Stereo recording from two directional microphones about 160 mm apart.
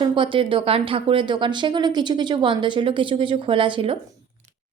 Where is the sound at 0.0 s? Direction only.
30° right (ahead or behind).